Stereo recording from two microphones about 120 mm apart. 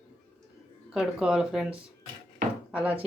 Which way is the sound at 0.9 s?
5° right (ahead or behind).